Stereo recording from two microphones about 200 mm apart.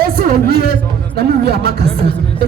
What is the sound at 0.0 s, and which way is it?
A man's voice, 50° right (ahead or behind).